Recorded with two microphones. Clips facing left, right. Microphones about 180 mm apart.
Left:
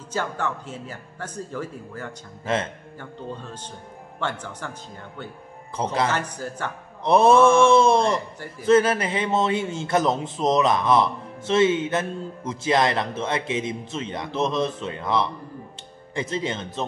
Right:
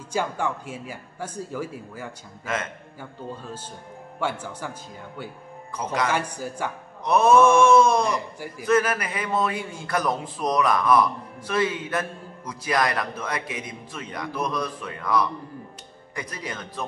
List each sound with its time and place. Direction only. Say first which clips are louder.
0.1 s a man's voice: right 1 dB; 10° right (ahead or behind)
2.4 s a man's voice: left 4 dB; 30° left (ahead or behind)
3.0 s a man's voice: left 1 dB; 10° right (ahead or behind)
5.8 s a man's voice: left 3 dB; 30° left (ahead or behind)
6.0 s a man's voice: even; 10° right (ahead or behind)
7.1 s a man's voice: left 1 dB; 30° left (ahead or behind)